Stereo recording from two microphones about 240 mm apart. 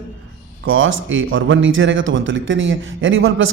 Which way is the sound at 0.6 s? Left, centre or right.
Right.